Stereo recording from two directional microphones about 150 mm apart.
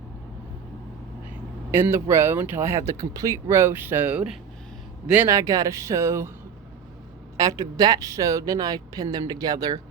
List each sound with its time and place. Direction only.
1.7 s speech: 15° right (ahead or behind)
7.3 s speech: 25° right (ahead or behind)